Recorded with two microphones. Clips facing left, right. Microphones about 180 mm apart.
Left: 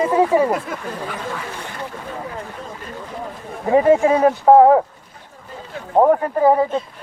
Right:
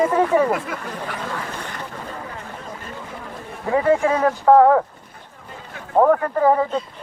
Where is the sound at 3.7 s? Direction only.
20° left (ahead or behind).